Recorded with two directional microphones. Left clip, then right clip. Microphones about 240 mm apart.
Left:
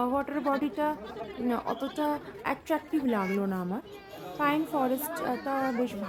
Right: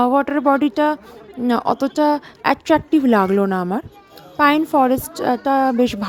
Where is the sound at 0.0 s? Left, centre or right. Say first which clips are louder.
Right 13 dB; right.